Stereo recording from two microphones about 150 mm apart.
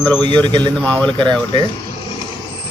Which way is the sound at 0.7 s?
5° left (ahead or behind).